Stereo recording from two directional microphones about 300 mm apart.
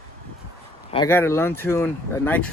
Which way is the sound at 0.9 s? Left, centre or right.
Centre.